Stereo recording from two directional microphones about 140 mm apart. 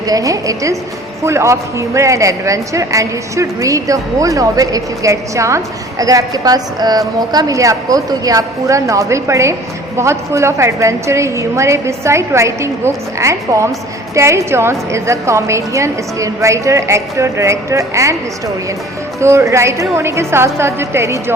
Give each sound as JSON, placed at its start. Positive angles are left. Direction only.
{"t": 0.1, "sound": "a woman's voice", "side_deg": -25}